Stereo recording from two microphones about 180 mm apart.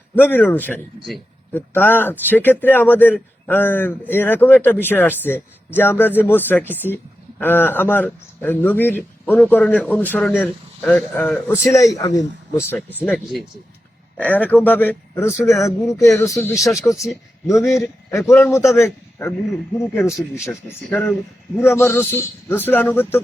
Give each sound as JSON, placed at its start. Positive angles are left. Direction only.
{"t": 0.2, "sound": "speech", "side_deg": 10}
{"t": 14.2, "sound": "a man's voice", "side_deg": 10}
{"t": 19.9, "sound": "speech", "side_deg": 15}